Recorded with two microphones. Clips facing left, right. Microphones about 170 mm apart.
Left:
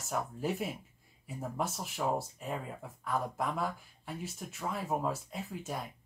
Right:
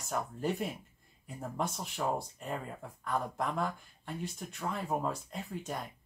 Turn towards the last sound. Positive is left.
turn(degrees=5)  # may be behind; listen again after turning